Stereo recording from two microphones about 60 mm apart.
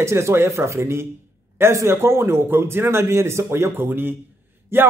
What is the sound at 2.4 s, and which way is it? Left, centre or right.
A man's voice, right.